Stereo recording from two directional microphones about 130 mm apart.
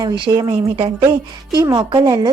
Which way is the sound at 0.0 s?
30° right (ahead or behind).